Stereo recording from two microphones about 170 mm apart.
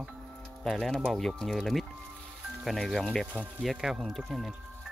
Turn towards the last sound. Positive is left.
turn(degrees=0)  # may be behind; listen again after turning